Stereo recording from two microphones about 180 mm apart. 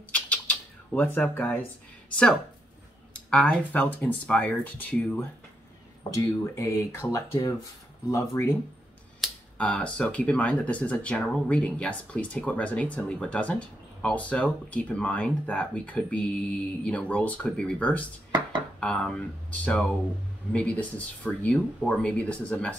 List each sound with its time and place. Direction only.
0.1 s a sound: 10° left (ahead or behind)
2.0 s speech: 5° left (ahead or behind)
9.2 s speech: 5° left (ahead or behind)